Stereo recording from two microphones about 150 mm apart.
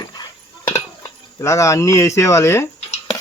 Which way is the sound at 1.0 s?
20° left (ahead or behind).